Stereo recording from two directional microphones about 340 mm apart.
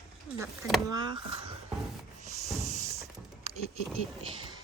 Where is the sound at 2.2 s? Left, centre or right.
Centre.